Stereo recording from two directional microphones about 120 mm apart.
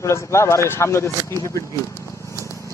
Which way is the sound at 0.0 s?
25° left (ahead or behind).